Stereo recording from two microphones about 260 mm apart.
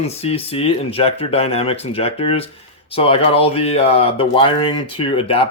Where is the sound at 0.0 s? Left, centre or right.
Left.